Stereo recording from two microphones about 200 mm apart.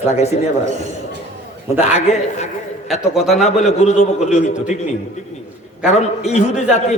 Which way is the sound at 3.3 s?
35° left (ahead or behind).